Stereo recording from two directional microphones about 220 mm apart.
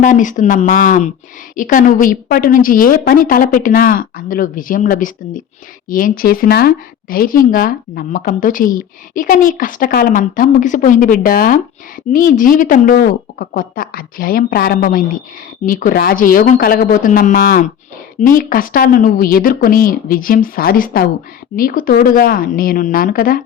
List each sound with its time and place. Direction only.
0.0 s speech: 35° left (ahead or behind)